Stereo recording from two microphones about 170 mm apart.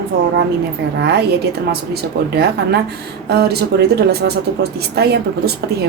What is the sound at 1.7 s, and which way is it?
A woman's voice, 70° right (ahead or behind).